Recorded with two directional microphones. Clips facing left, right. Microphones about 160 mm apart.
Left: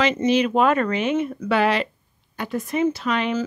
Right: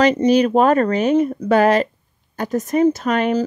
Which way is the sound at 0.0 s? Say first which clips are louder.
Right 5 dB; 40° right (ahead or behind).